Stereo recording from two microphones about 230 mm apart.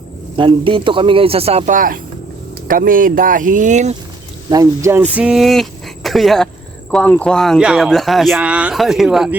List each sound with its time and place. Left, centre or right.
0.3 s speech: right
4.4 s speech: centre